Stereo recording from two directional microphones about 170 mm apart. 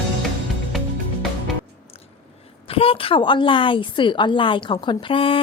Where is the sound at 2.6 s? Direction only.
35° left (ahead or behind).